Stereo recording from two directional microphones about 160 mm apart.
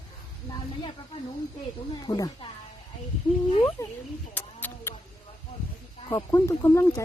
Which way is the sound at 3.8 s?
15° left (ahead or behind).